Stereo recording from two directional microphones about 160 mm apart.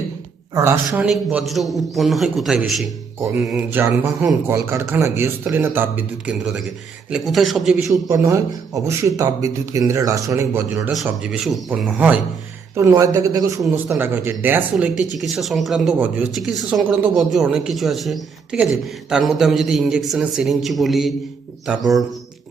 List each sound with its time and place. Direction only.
0.5 s a man's voice: 20° right (ahead or behind)
1.0 s speech: 5° right (ahead or behind)
7.9 s a man's voice: 20° right (ahead or behind)
10.9 s a man's voice: 5° right (ahead or behind)
15.2 s speech: centre (ahead or behind)